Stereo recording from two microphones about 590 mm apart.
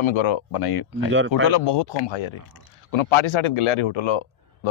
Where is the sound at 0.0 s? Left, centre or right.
Left.